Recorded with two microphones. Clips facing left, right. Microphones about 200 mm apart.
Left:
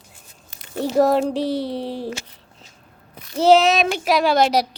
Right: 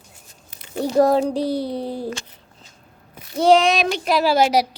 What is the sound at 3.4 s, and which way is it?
A child's voice, 5° left (ahead or behind).